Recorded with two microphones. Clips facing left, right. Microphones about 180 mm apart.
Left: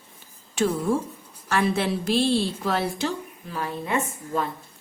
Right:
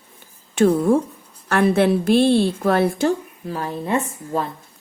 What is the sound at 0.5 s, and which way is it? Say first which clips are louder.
A woman's voice: right 7 dB; 55° right (ahead or behind).